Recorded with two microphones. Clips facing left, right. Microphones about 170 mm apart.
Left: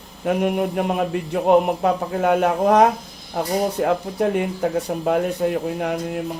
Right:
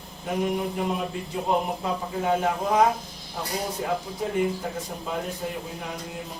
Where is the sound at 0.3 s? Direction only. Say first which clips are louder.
Left 6 dB; 65° left (ahead or behind).